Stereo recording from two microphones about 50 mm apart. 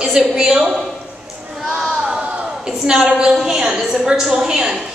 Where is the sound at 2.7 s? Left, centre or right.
Centre.